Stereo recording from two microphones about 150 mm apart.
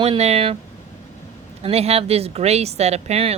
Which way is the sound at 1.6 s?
45° right (ahead or behind).